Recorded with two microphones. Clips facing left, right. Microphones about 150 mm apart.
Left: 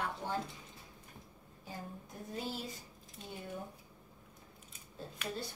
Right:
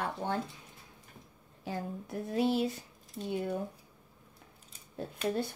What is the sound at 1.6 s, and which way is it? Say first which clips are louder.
Speech: right 9 dB; 75° right (ahead or behind).